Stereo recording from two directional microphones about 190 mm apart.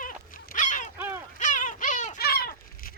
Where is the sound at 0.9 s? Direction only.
10° right (ahead or behind).